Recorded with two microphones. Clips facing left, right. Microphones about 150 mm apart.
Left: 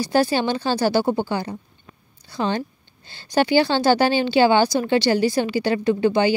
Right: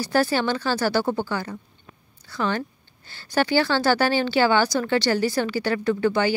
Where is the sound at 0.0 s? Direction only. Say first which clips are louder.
Left 2 dB; 15° left (ahead or behind).